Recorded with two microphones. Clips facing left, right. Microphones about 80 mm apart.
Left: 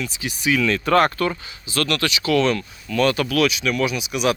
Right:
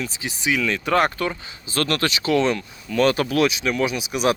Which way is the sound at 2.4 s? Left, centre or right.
Centre.